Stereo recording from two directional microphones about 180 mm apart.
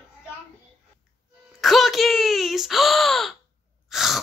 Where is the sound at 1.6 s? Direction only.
Centre (ahead or behind).